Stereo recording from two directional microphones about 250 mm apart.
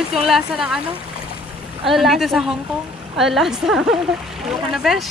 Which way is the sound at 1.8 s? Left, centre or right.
Centre.